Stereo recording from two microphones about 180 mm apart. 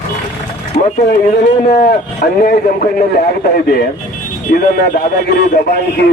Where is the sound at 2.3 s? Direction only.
60° left (ahead or behind).